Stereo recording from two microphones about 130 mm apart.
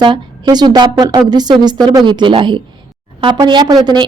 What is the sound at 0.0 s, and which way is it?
A woman's voice, 35° right (ahead or behind).